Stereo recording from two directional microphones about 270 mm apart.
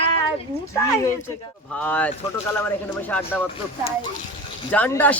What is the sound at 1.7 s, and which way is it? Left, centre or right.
Speech, centre.